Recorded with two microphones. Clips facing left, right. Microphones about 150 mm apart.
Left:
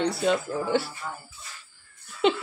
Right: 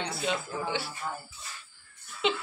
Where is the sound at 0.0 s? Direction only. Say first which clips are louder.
Left 8 dB; 55° left (ahead or behind).